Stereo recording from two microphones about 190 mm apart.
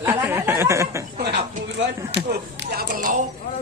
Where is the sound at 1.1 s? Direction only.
50° right (ahead or behind).